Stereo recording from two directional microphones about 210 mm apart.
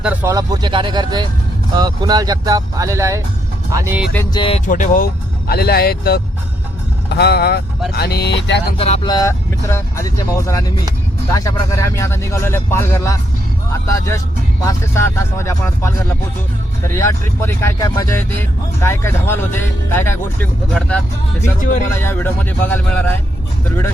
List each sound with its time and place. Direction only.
0.0 s speech: 10° right (ahead or behind)
4.4 s speech: 30° left (ahead or behind); by 8.6 s 55° left (ahead or behind)
8.8 s speech: 25° left (ahead or behind); by 21.0 s 5° left (ahead or behind)
21.6 s speech: 40° left (ahead or behind)
21.9 s speech: 10° left (ahead or behind)